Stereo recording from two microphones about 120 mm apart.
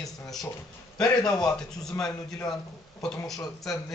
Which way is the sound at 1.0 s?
30° left (ahead or behind).